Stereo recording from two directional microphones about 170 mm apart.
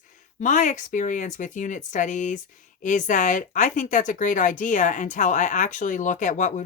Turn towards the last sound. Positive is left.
turn(degrees=50)  # may be behind; listen again after turning